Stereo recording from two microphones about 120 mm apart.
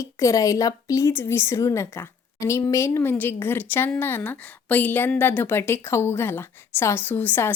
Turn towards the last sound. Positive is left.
turn(degrees=15)  # may be behind; listen again after turning